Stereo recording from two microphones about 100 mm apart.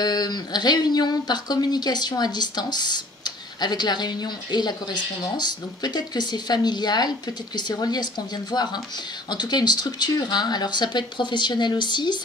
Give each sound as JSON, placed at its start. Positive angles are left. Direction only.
{"t": 0.0, "sound": "speech", "side_deg": 40}